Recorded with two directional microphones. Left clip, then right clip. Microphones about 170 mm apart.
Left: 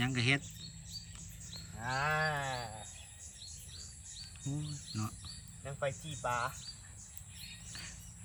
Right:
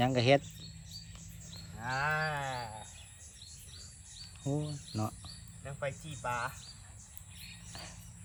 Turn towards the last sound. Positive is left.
turn(degrees=5)  # may be behind; listen again after turning